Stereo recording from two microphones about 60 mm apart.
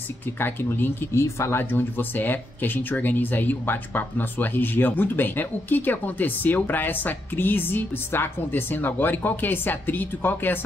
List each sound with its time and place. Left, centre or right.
0.4 s speech: left
1.6 s speech: left